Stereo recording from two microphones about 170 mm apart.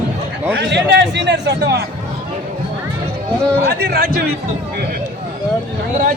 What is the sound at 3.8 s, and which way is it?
Speech, 65° right (ahead or behind).